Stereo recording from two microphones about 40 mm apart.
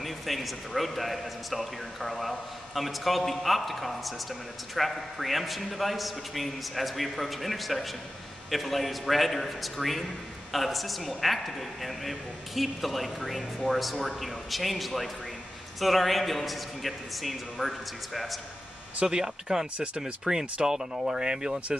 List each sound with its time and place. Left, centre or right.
0.0 s a man's voice: centre
19.0 s speech: centre